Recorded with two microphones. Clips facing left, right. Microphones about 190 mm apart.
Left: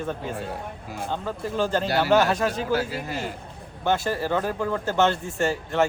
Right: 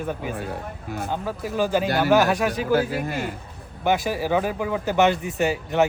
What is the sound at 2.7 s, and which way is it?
Speech, 55° right (ahead or behind).